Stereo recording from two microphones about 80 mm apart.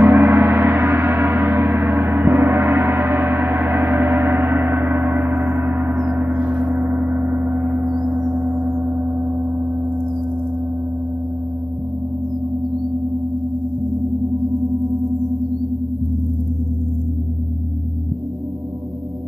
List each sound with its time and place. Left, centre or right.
0.0 s gong: right